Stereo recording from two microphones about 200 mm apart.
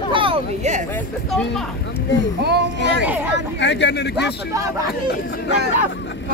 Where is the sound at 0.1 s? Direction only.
25° right (ahead or behind).